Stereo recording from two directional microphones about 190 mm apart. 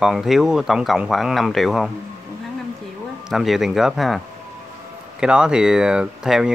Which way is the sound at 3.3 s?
Centre (ahead or behind).